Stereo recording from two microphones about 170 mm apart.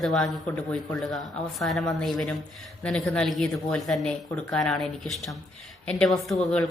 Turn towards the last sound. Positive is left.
turn(degrees=5)  # may be behind; listen again after turning